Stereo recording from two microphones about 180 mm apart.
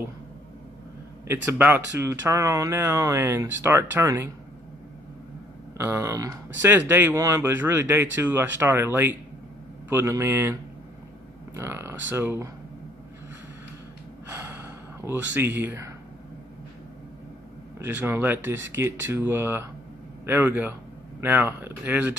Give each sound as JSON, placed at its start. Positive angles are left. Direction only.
{"t": 1.2, "sound": "speech", "side_deg": -15}
{"t": 5.8, "sound": "speech", "side_deg": -15}
{"t": 14.3, "sound": "gasp", "side_deg": -15}
{"t": 17.7, "sound": "speech", "side_deg": -10}